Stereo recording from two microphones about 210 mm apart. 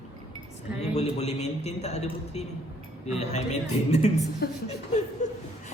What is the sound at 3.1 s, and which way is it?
Speech, 30° left (ahead or behind).